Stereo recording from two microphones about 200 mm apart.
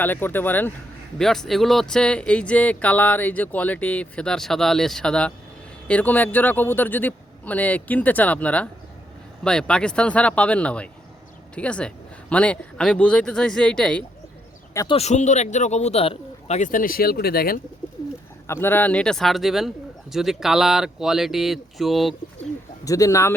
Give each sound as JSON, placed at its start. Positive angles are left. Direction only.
{"t": 0.0, "sound": "speech", "side_deg": 10}
{"t": 14.7, "sound": "speech", "side_deg": 15}
{"t": 14.9, "sound": "speech", "side_deg": 35}
{"t": 18.4, "sound": "speech", "side_deg": 10}
{"t": 22.8, "sound": "speech", "side_deg": 15}